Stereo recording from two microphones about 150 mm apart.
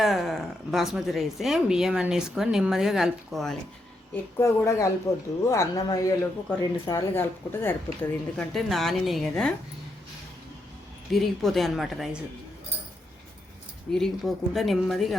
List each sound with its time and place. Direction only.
0.0 s speech: centre (ahead or behind)
4.1 s speech: 20° left (ahead or behind)
8.5 s speech: centre (ahead or behind)
11.1 s speech: centre (ahead or behind)
13.9 s speech: centre (ahead or behind)